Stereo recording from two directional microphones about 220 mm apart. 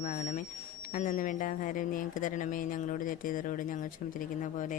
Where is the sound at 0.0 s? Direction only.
35° left (ahead or behind).